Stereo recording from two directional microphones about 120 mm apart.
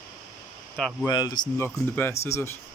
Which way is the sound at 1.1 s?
35° left (ahead or behind).